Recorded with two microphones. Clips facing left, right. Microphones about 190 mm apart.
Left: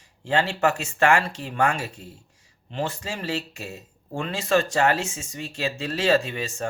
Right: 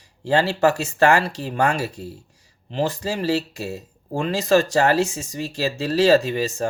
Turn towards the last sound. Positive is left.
turn(degrees=-35)  # may be behind; listen again after turning